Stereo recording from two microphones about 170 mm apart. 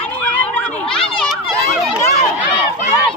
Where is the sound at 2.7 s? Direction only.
10° left (ahead or behind).